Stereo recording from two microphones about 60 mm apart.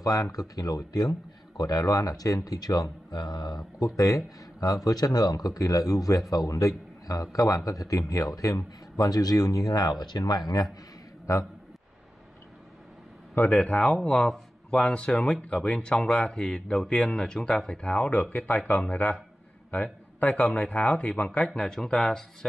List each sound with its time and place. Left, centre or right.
0.0 s speech: left
3.8 s a man's voice: left
8.9 s speech: left
11.3 s a man's voice: left
13.6 s speech: centre
21.5 s speech: centre